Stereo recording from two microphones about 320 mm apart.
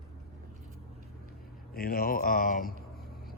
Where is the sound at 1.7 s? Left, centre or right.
Left.